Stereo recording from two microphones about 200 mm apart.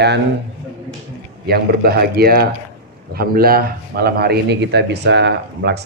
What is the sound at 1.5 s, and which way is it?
Speech, 50° right (ahead or behind).